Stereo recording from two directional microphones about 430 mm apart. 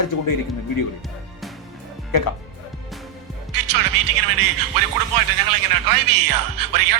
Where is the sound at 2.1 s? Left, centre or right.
Left.